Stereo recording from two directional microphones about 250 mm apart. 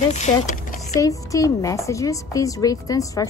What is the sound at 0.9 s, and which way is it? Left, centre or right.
A woman's voice, centre.